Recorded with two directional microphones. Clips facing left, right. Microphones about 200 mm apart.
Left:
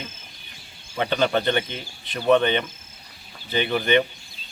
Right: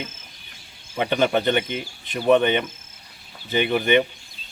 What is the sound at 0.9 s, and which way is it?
A woman's voice, 15° right (ahead or behind).